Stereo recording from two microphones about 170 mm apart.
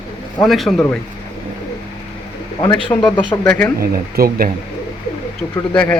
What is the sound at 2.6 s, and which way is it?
Speech, 20° left (ahead or behind).